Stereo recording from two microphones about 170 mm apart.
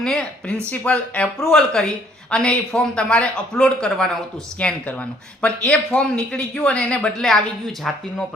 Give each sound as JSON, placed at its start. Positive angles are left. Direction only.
{"t": 0.0, "sound": "a man's voice", "side_deg": 5}